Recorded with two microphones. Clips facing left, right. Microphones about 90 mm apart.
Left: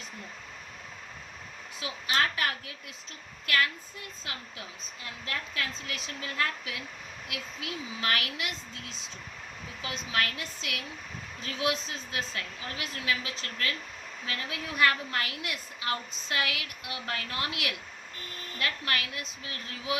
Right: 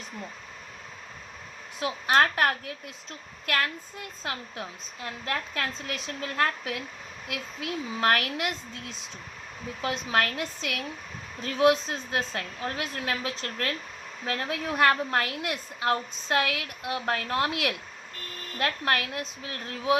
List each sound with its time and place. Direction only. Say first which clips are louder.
1.8 s a woman's voice: right 7 dB; 45° right (ahead or behind)
4.2 s a woman's voice: right 8 dB; 40° right (ahead or behind)